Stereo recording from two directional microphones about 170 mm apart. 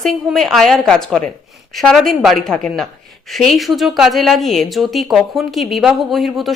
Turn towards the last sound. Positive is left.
turn(degrees=0)  # may be behind; listen again after turning